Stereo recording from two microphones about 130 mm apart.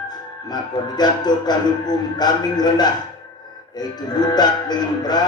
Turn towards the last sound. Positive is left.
turn(degrees=30)  # may be behind; listen again after turning